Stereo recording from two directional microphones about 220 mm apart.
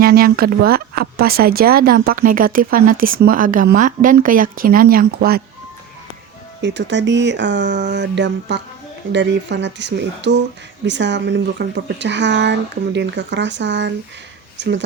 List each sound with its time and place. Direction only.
0.0 s speech: 45° right (ahead or behind)
6.6 s speech: 55° right (ahead or behind)